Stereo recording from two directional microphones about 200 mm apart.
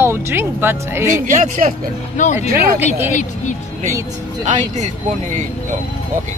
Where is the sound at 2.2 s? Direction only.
40° left (ahead or behind).